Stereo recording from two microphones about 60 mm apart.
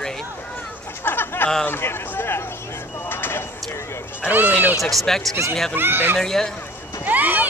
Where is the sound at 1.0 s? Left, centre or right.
Left.